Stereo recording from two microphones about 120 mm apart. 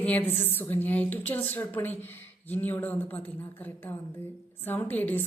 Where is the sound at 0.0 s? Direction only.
15° left (ahead or behind).